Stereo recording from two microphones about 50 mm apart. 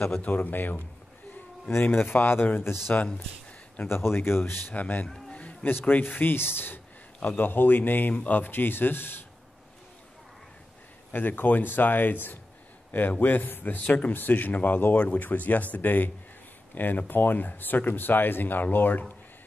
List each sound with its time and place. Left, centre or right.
0.2 s speech: left
4.7 s speech: left
5.3 s a sound: left
5.7 s speech: left
7.2 s a man's voice: left
7.4 s speech: left
11.1 s speech: left
13.8 s speech: left
14.1 s speech: left